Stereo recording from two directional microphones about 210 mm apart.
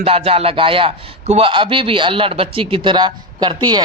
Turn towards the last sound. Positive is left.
turn(degrees=-20)  # may be behind; listen again after turning